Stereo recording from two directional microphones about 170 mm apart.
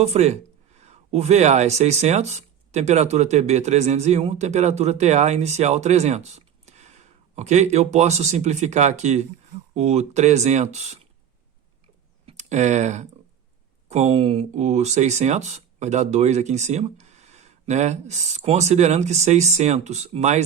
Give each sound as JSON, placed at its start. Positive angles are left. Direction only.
{"t": 0.0, "sound": "speech", "side_deg": -40}
{"t": 12.2, "sound": "speech", "side_deg": -45}